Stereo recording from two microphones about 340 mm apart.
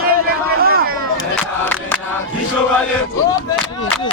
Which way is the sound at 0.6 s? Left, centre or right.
Right.